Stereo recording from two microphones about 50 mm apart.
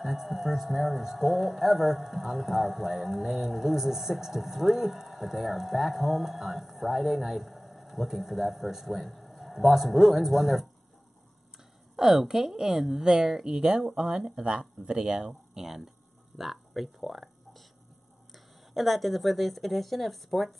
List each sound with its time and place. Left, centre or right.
0.0 s speech: centre
12.0 s speech: centre
16.3 s a sound: centre
18.3 s speech: centre